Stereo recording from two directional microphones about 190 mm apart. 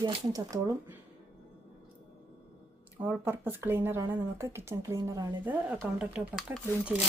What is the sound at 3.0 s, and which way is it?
Speech, 10° right (ahead or behind).